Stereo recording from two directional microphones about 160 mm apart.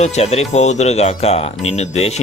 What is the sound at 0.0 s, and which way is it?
Speech, 45° left (ahead or behind).